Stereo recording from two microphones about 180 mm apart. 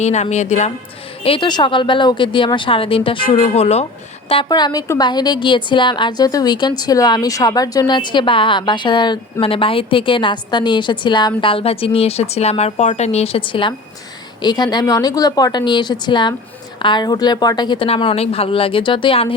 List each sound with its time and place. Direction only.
0.0 s a woman's voice: 40° left (ahead or behind)
1.2 s a woman's voice: 30° left (ahead or behind)